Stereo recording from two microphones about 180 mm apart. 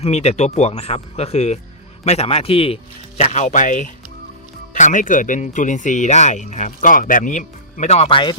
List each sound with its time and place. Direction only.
0.0 s speech: 35° left (ahead or behind)